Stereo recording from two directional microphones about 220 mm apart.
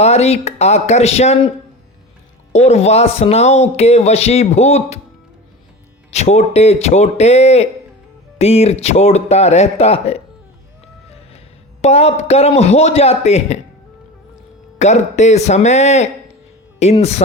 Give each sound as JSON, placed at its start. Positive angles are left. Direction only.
{"t": 0.0, "sound": "speech", "side_deg": 30}
{"t": 2.5, "sound": "speech", "side_deg": 30}
{"t": 6.1, "sound": "speech", "side_deg": 30}
{"t": 11.8, "sound": "speech", "side_deg": 30}
{"t": 14.8, "sound": "speech", "side_deg": 30}